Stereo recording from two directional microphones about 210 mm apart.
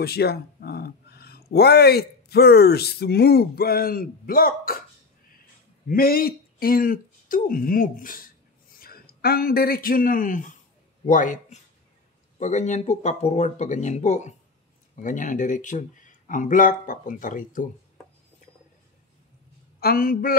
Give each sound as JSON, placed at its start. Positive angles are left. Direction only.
{"t": 0.0, "sound": "speech", "side_deg": 50}
{"t": 5.9, "sound": "speech", "side_deg": 45}
{"t": 19.8, "sound": "speech", "side_deg": 45}